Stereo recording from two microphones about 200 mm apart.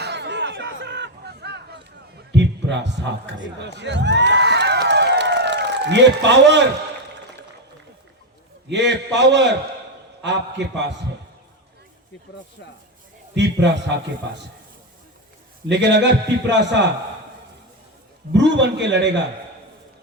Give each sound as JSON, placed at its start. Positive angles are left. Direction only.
{"t": 0.0, "sound": "a sound", "side_deg": -60}
{"t": 2.3, "sound": "a man's voice", "side_deg": -60}
{"t": 3.8, "sound": "a sound", "side_deg": -60}
{"t": 8.7, "sound": "a man's voice", "side_deg": -60}
{"t": 10.6, "sound": "a man's voice", "side_deg": -60}
{"t": 13.3, "sound": "a man's voice", "side_deg": -60}
{"t": 15.7, "sound": "a man's voice", "side_deg": -60}
{"t": 18.3, "sound": "a man's voice", "side_deg": -60}